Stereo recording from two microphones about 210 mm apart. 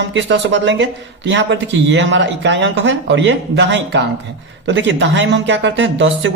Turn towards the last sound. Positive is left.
turn(degrees=-60)  # may be behind; listen again after turning